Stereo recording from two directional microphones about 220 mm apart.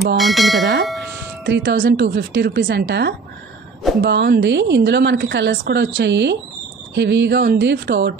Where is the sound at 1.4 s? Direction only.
50° right (ahead or behind).